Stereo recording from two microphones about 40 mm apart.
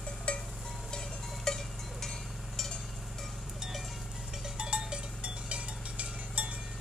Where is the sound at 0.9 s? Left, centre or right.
Centre.